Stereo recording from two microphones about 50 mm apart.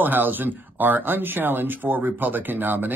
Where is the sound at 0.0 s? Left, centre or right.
Right.